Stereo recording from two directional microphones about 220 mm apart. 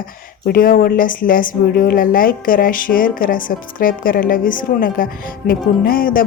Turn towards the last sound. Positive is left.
turn(degrees=40)  # may be behind; listen again after turning